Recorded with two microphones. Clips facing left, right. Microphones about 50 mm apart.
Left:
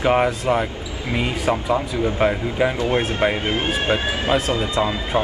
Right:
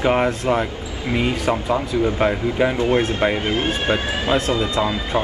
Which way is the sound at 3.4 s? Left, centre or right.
Left.